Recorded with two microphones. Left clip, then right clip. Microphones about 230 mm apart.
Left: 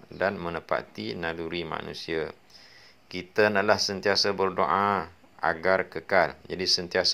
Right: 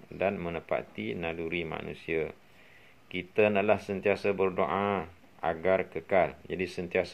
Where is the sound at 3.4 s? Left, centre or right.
Centre.